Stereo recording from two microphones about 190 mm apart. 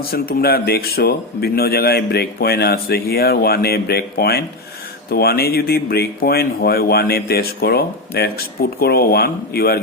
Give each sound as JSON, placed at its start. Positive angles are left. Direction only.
{"t": 0.1, "sound": "speech", "side_deg": 55}